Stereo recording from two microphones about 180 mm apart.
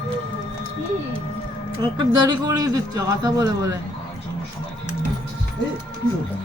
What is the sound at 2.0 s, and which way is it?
A man's voice, 20° right (ahead or behind).